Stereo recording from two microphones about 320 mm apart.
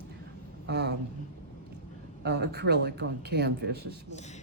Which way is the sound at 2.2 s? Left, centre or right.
Right.